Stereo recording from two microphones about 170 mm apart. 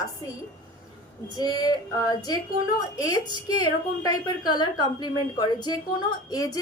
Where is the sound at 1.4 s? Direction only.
25° left (ahead or behind).